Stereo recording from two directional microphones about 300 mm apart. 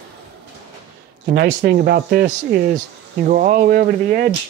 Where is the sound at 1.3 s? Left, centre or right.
Right.